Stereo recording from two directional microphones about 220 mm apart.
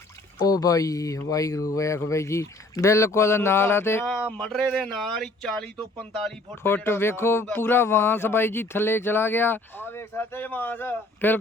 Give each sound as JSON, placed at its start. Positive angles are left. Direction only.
{"t": 0.4, "sound": "speech", "side_deg": 15}